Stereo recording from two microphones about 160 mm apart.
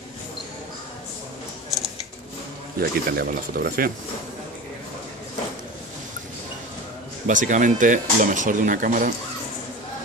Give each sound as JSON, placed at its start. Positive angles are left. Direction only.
{"t": 2.8, "sound": "speech", "side_deg": -70}
{"t": 7.2, "sound": "speech", "side_deg": -50}